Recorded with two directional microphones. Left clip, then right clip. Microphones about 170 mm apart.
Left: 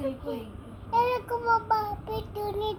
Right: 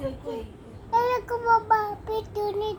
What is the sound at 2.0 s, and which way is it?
Child singing, 20° right (ahead or behind).